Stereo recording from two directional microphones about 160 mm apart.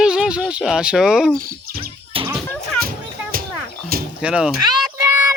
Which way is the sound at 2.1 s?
35° right (ahead or behind).